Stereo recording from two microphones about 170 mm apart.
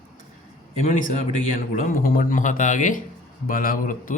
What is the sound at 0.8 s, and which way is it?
Speech, 45° left (ahead or behind).